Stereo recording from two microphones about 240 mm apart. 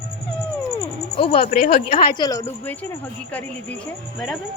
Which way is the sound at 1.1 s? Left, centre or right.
Left.